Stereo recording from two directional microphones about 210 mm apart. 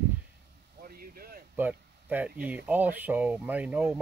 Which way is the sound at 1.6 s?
10° right (ahead or behind).